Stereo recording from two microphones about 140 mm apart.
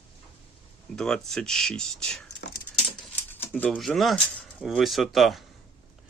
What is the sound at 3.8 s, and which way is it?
Speech, centre (ahead or behind).